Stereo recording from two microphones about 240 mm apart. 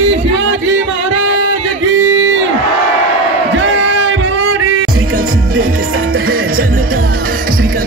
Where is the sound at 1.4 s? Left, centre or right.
Right.